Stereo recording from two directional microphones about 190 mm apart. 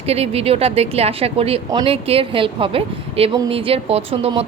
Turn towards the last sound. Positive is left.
turn(degrees=-30)  # may be behind; listen again after turning